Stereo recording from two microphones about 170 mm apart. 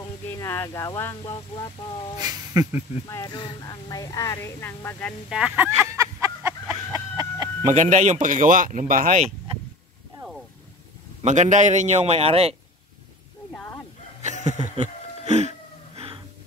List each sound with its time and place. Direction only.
0.3 s speech: 15° left (ahead or behind)
2.1 s speech: 25° right (ahead or behind)
3.1 s speech: 20° left (ahead or behind)
5.3 s speech: 5° right (ahead or behind)
5.8 s a sound: 20° right (ahead or behind)
6.9 s chicken: 20° right (ahead or behind)
7.7 s speech: 45° right (ahead or behind)
11.2 s speech: 45° right (ahead or behind)
13.5 s bow-wow: 5° left (ahead or behind)
14.2 s music: 45° right (ahead or behind)